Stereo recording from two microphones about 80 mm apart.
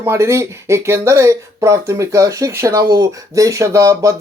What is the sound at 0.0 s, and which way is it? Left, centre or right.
Speech, right.